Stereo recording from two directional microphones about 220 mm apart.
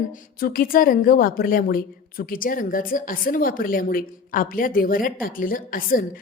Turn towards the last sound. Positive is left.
turn(degrees=40)  # may be behind; listen again after turning